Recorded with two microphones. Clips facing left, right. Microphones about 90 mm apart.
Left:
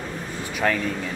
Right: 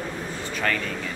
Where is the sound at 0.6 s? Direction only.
15° left (ahead or behind).